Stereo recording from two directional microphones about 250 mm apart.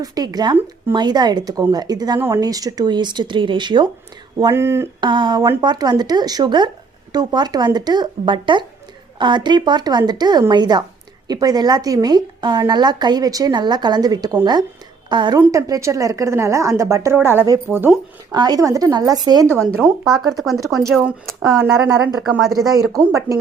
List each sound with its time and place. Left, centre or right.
0.0 s a woman's voice: centre
19.7 s a woman's voice: centre
23.0 s a woman's voice: centre